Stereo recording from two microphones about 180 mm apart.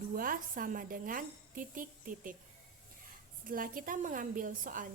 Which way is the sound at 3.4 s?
50° right (ahead or behind).